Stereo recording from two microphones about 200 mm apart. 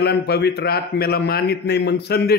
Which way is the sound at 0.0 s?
55° left (ahead or behind).